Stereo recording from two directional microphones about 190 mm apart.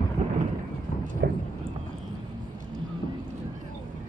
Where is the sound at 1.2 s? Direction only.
60° right (ahead or behind).